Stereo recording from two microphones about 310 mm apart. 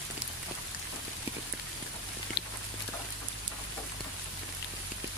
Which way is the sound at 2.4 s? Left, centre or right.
Left.